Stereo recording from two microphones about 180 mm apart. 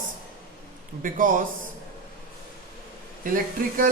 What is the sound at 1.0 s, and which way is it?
Speech, 50° right (ahead or behind).